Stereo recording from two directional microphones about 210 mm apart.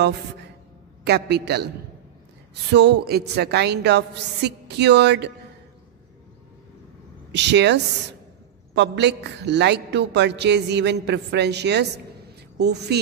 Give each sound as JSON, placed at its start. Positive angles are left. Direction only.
{"t": 1.0, "sound": "a woman's voice", "side_deg": -50}
{"t": 2.7, "sound": "a woman's voice", "side_deg": -55}
{"t": 7.3, "sound": "a woman's voice", "side_deg": -55}